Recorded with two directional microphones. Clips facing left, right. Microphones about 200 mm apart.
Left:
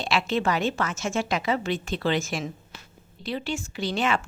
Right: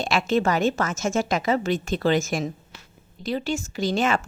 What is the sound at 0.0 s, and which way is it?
A woman's voice, 45° right (ahead or behind).